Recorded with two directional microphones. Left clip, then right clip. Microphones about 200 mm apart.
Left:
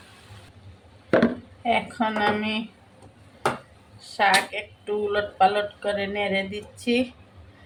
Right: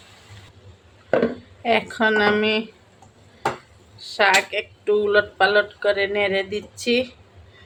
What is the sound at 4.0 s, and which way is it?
Speech, 40° right (ahead or behind).